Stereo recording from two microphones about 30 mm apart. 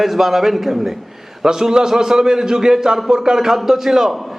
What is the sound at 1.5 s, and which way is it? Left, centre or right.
A man's voice, right.